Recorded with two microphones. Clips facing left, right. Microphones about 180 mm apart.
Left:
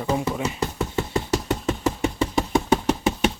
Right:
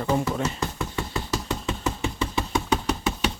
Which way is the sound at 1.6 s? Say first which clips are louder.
Left 4 dB; 45° left (ahead or behind).